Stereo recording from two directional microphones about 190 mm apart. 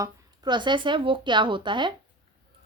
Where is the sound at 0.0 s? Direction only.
25° right (ahead or behind).